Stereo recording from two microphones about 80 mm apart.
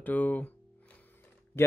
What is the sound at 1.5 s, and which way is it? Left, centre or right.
Speech, left.